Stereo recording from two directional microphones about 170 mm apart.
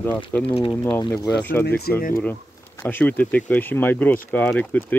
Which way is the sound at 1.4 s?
10° left (ahead or behind).